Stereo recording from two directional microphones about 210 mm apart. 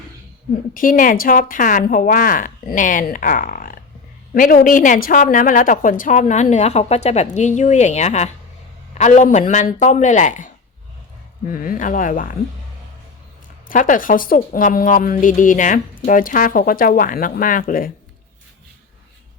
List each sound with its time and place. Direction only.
0.7 s a woman's voice: 40° left (ahead or behind)
11.5 s a woman's voice: 40° left (ahead or behind)
13.7 s a woman's voice: 40° left (ahead or behind)